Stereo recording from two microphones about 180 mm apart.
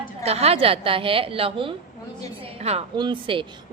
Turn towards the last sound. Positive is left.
turn(degrees=-30)  # may be behind; listen again after turning